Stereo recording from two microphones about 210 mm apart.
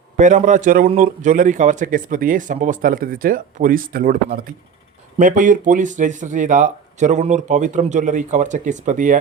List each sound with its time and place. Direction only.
0.2 s speech: 35° right (ahead or behind)